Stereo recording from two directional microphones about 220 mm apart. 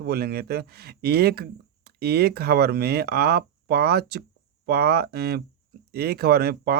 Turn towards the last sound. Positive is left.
turn(degrees=-45)  # may be behind; listen again after turning